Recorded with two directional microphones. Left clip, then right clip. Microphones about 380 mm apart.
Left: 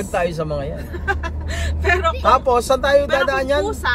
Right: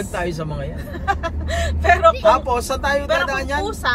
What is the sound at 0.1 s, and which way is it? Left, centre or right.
Speech, centre.